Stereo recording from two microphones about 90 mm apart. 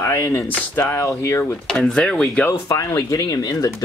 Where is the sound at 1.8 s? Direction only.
10° left (ahead or behind).